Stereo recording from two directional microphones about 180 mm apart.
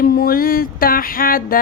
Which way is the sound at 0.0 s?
55° left (ahead or behind).